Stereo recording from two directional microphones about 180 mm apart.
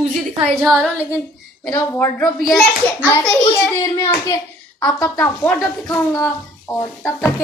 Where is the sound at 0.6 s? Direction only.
Centre (ahead or behind).